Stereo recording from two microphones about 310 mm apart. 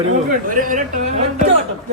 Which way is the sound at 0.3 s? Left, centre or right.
Right.